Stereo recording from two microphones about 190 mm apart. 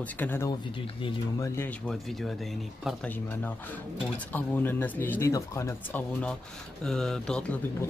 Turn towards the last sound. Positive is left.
turn(degrees=5)  # may be behind; listen again after turning